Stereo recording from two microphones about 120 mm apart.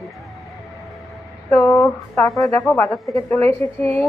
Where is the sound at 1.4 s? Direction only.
15° left (ahead or behind).